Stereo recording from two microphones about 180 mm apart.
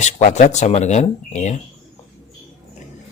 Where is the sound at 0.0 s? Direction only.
45° left (ahead or behind).